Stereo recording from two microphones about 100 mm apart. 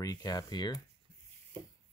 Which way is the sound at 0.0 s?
40° left (ahead or behind).